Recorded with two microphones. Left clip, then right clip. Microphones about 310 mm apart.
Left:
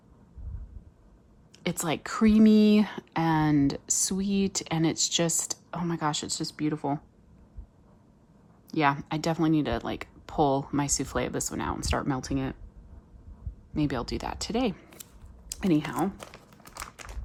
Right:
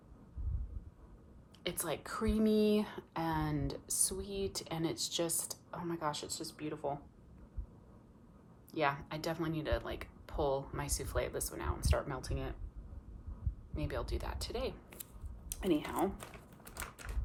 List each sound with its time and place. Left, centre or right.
1.6 s a woman's voice: centre
8.7 s a woman's voice: left
13.7 s a woman's voice: left